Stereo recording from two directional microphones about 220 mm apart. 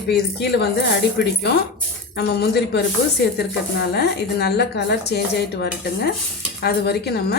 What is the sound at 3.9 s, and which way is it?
A woman's voice, 50° left (ahead or behind).